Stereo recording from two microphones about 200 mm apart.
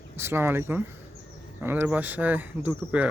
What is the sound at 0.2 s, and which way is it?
Speech, 10° right (ahead or behind).